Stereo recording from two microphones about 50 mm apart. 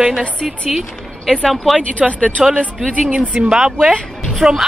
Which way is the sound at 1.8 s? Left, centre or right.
Left.